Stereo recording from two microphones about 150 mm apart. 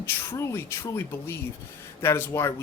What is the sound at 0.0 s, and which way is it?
Speech, 20° left (ahead or behind).